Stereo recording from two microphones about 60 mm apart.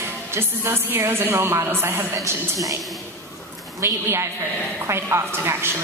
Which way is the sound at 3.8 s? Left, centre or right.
Right.